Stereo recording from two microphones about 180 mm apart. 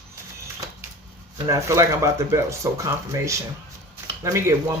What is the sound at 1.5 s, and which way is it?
Speech, 15° right (ahead or behind).